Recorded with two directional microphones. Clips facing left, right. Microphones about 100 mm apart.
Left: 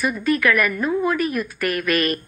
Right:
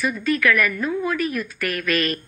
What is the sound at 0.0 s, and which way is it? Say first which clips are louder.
A woman's voice: left 1 dB; 45° left (ahead or behind).